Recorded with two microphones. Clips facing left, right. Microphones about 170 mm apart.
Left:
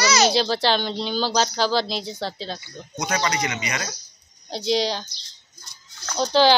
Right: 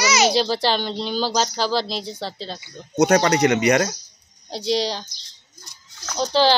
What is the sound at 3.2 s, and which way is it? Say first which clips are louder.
Speech: right 9 dB; 60° right (ahead or behind).